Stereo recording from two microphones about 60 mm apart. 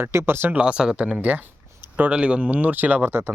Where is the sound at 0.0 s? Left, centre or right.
Right.